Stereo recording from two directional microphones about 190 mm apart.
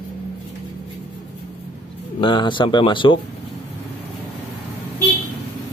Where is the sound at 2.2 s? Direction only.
25° left (ahead or behind).